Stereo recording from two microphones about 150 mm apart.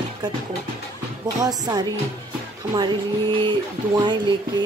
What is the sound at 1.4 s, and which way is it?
A woman's voice, 25° right (ahead or behind).